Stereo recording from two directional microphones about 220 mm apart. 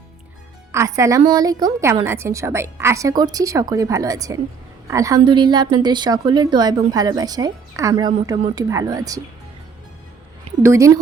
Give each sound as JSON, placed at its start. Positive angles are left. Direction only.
{"t": 0.7, "sound": "a woman's voice", "side_deg": -15}
{"t": 10.6, "sound": "a woman's voice", "side_deg": -15}